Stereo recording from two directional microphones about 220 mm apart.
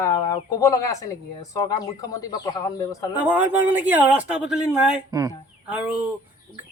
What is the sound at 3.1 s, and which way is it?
A man's voice, 5° right (ahead or behind).